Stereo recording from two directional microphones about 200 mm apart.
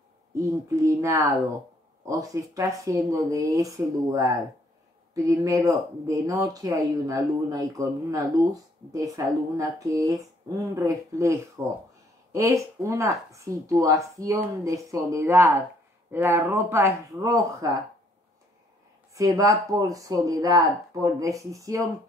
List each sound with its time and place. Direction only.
0.4 s speech: 15° right (ahead or behind)
19.1 s speech: 15° right (ahead or behind)